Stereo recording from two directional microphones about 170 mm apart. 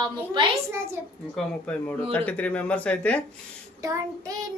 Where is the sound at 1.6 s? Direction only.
10° left (ahead or behind).